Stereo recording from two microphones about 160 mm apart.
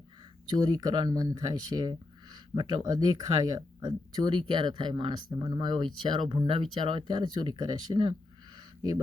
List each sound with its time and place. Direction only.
0.5 s speech: 25° right (ahead or behind)